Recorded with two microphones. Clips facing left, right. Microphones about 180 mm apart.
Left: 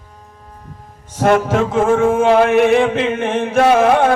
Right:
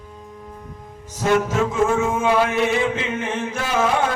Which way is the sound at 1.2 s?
65° left (ahead or behind).